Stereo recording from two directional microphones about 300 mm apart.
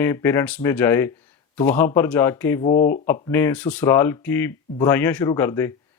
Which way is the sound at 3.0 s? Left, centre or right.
Centre.